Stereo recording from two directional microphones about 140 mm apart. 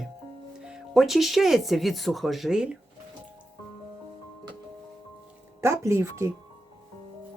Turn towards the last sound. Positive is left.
turn(degrees=-20)  # may be behind; listen again after turning